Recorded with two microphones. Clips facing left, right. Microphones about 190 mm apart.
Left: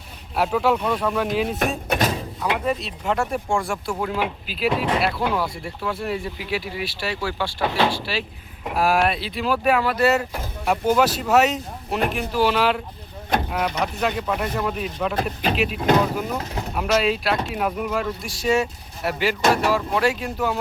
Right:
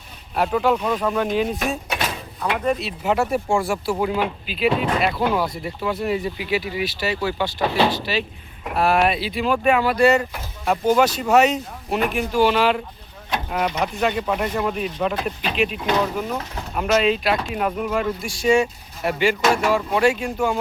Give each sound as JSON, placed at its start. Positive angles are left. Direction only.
{"t": 0.3, "sound": "speech", "side_deg": 0}
{"t": 1.9, "sound": "a sound", "side_deg": 40}
{"t": 2.6, "sound": "speech", "side_deg": -5}
{"t": 4.2, "sound": "speech", "side_deg": 0}
{"t": 15.1, "sound": "speech", "side_deg": 45}
{"t": 15.5, "sound": "speech", "side_deg": 5}